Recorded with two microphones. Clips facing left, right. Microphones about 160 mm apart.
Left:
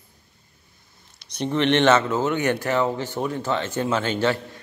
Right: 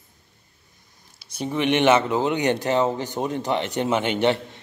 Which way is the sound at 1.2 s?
5° right (ahead or behind).